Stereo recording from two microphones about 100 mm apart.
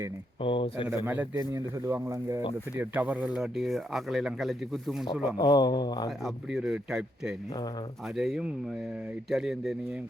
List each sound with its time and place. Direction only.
0.4 s speech: 60° left (ahead or behind)
1.0 s a man's voice: 20° right (ahead or behind)
1.4 s speech: 30° right (ahead or behind)
2.7 s speech: 15° right (ahead or behind)
5.4 s speech: 40° left (ahead or behind)
6.1 s speech: centre (ahead or behind)